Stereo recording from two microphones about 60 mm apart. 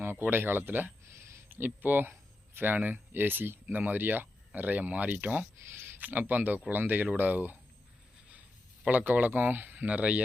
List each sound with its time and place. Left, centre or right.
0.0 s speech: right
8.8 s speech: right